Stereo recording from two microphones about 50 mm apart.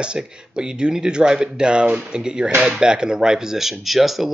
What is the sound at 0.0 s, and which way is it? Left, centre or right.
Speech, centre.